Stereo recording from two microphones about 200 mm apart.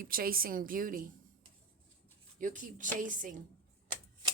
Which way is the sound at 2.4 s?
40° right (ahead or behind).